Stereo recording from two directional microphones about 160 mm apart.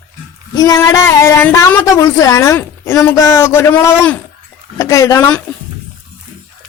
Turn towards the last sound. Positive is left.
turn(degrees=15)  # may be behind; listen again after turning